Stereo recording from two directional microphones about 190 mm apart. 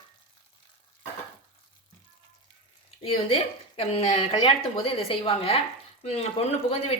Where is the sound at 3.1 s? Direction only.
30° left (ahead or behind).